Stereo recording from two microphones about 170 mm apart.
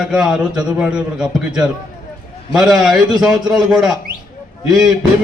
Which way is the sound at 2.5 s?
5° right (ahead or behind).